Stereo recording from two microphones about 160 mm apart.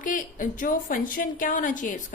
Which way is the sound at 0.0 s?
55° left (ahead or behind).